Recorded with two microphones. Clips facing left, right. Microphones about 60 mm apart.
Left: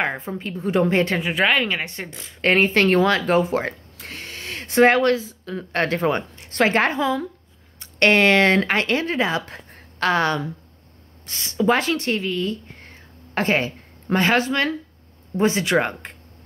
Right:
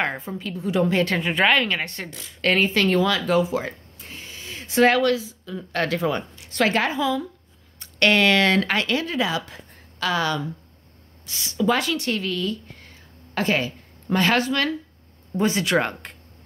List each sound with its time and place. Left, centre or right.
0.0 s a woman's voice: left
1.2 s a woman's voice: centre; by 3.7 s left
4.0 s a sound: left
4.7 s a woman's voice: left
5.7 s a woman's voice: left
12.2 s a sound: left
14.2 s speech: left